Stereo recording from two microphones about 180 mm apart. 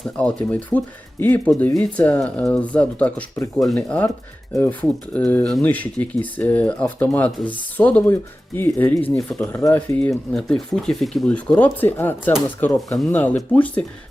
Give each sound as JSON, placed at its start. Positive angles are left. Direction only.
{"t": 0.2, "sound": "speech", "side_deg": 5}